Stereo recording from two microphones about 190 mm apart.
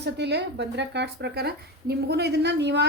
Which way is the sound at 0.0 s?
60° right (ahead or behind).